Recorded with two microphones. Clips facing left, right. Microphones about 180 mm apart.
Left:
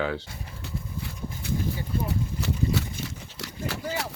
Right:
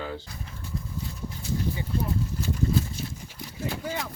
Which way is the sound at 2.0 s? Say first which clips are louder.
Even; 80° left.